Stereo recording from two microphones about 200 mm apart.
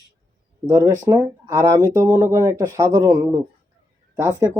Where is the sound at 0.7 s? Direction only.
15° right (ahead or behind).